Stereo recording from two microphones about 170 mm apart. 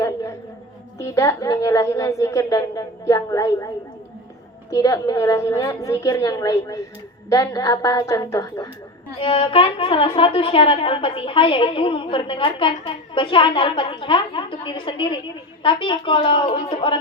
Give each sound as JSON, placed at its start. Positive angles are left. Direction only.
{"t": 0.0, "sound": "a sound", "side_deg": 20}
{"t": 0.9, "sound": "a woman's voice", "side_deg": 20}
{"t": 4.7, "sound": "a woman's voice", "side_deg": 20}
{"t": 9.1, "sound": "a woman's voice", "side_deg": 35}